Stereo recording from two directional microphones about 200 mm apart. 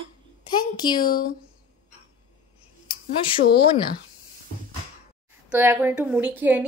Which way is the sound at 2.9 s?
25° left (ahead or behind).